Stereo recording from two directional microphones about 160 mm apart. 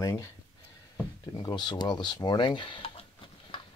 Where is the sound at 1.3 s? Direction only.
25° left (ahead or behind).